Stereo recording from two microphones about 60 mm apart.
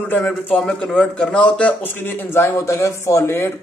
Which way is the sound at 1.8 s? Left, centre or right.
Left.